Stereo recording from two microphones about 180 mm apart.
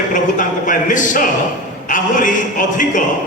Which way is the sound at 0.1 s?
45° left (ahead or behind).